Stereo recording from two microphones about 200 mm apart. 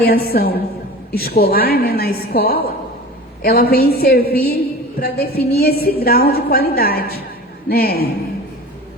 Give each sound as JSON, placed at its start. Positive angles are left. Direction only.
{"t": 0.0, "sound": "a woman's voice", "side_deg": 50}